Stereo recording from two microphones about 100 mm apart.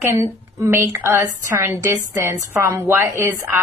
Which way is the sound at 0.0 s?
30° right (ahead or behind).